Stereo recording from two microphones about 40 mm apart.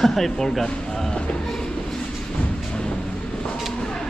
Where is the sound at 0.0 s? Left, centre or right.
Centre.